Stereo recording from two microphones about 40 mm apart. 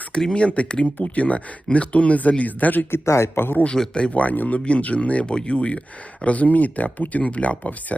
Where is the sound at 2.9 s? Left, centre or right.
Left.